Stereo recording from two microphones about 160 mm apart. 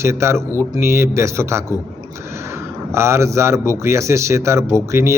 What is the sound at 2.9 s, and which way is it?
A man's voice, 15° right (ahead or behind).